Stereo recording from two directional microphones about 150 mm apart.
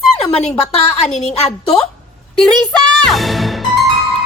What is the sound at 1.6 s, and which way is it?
Speech, 5° left (ahead or behind).